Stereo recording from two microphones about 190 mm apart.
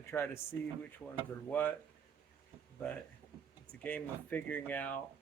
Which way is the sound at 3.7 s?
5° left (ahead or behind).